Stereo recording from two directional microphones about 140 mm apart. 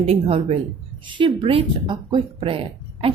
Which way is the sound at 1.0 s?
35° right (ahead or behind).